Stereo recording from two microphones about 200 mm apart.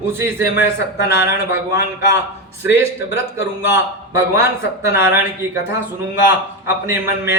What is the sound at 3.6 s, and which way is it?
A man's voice, 10° right (ahead or behind).